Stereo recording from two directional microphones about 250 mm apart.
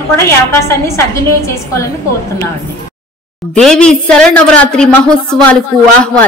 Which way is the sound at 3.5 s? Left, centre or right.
Centre.